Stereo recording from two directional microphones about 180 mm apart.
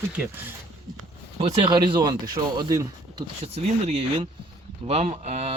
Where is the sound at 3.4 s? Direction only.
35° right (ahead or behind).